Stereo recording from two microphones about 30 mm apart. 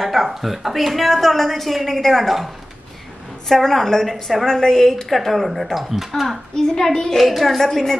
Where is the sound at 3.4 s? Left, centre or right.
Centre.